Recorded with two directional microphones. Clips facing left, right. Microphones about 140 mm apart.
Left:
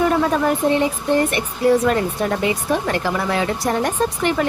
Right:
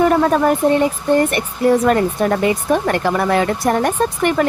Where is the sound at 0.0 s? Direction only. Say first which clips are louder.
Right 4 dB; 50° right (ahead or behind).